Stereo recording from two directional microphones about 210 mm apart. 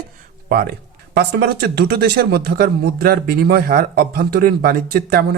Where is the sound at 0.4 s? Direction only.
45° right (ahead or behind).